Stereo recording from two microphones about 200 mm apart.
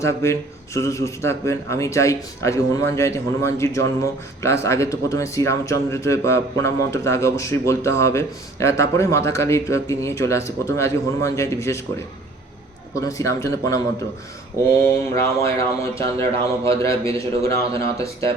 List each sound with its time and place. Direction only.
0.0 s speech: 15° left (ahead or behind)
12.9 s speech: 15° left (ahead or behind)
14.8 s speech: 15° left (ahead or behind)